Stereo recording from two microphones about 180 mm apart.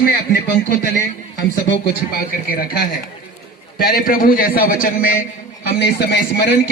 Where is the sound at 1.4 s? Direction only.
80° left.